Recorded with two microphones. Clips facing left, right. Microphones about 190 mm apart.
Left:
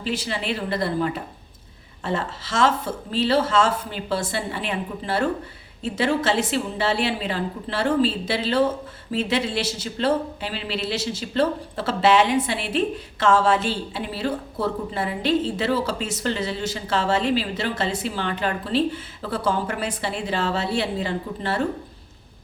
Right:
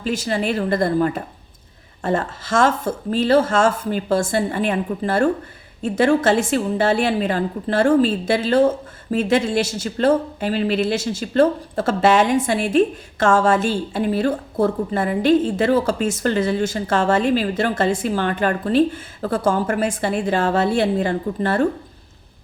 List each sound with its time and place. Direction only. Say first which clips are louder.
0.0 s a woman's voice: right 6 dB; 45° right (ahead or behind)